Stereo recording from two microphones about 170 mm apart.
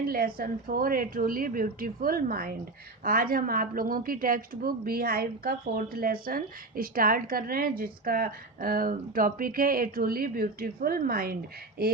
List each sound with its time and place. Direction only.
0.1 s a woman's voice: 60° right (ahead or behind)